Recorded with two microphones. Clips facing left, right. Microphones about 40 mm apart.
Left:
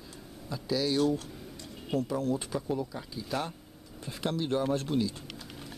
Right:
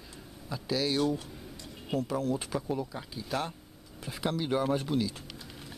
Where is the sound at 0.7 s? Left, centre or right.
Right.